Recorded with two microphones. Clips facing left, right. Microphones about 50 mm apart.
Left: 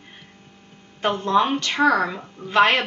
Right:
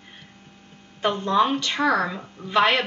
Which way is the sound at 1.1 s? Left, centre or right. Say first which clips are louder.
Left 1 dB; centre.